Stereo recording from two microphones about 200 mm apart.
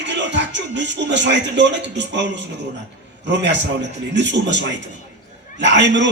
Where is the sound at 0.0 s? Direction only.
60° right (ahead or behind).